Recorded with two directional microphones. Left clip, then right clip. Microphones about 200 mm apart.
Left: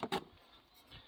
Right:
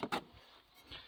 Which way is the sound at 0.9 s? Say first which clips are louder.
Right 6 dB; 65° right (ahead or behind).